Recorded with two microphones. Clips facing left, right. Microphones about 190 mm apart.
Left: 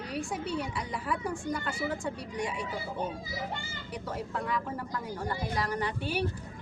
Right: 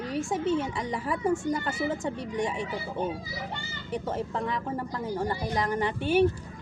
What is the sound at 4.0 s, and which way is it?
Speech, 25° right (ahead or behind).